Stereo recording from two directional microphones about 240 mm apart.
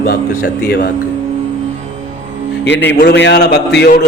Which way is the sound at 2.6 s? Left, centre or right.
Left.